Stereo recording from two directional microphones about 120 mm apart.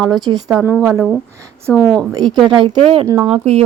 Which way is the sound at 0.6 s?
15° right (ahead or behind).